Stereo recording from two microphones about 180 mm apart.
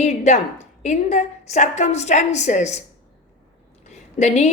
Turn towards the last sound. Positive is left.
turn(degrees=40)  # may be behind; listen again after turning